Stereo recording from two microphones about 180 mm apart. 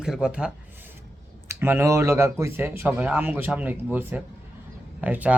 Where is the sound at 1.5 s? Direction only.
15° right (ahead or behind).